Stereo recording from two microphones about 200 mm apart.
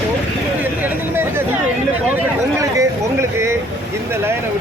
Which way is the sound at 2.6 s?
15° right (ahead or behind).